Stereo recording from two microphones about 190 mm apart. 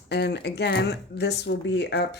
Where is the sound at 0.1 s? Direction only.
60° left (ahead or behind).